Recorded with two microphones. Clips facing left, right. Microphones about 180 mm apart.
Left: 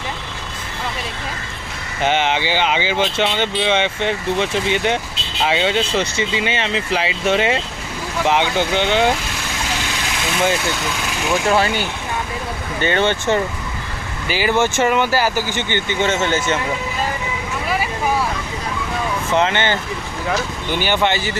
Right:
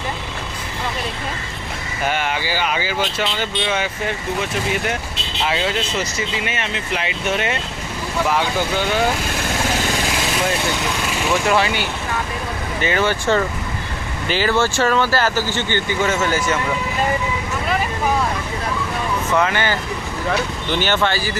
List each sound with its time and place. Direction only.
2.0 s speech: 25° left (ahead or behind)
12.8 s speech: 30° left (ahead or behind)
19.3 s speech: 25° left (ahead or behind)
20.7 s speech: 10° left (ahead or behind)